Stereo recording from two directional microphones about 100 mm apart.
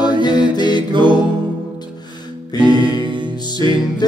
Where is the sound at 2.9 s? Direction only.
50° right (ahead or behind).